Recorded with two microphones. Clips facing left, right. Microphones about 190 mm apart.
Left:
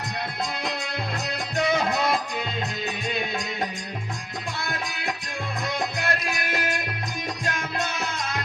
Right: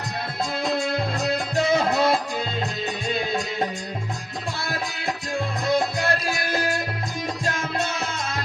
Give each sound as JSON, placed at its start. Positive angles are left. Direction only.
{"t": 1.2, "sound": "music", "side_deg": -30}
{"t": 6.0, "sound": "music", "side_deg": -30}